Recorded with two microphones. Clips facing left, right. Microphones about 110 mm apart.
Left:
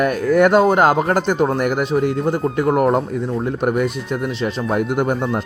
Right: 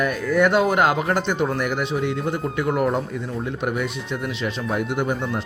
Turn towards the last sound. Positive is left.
turn(degrees=55)  # may be behind; listen again after turning